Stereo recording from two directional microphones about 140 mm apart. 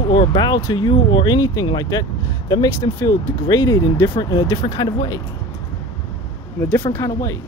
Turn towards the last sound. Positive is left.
turn(degrees=20)  # may be behind; listen again after turning